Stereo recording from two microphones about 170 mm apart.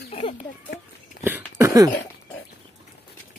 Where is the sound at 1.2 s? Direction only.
10° right (ahead or behind).